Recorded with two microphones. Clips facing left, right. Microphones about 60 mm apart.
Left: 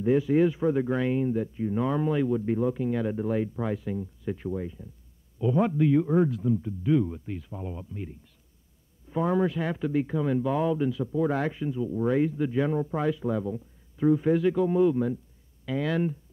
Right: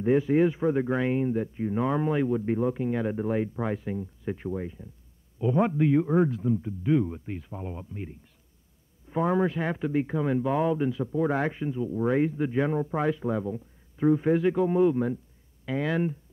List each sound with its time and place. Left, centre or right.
0.0 s speech: right
9.1 s speech: right